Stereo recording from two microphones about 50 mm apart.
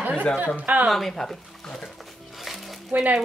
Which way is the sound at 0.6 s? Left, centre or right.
Right.